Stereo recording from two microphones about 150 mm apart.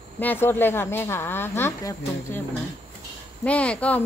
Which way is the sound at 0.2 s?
15° left (ahead or behind).